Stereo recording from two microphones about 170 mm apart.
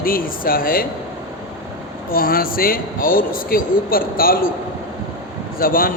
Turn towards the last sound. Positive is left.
turn(degrees=60)  # may be behind; listen again after turning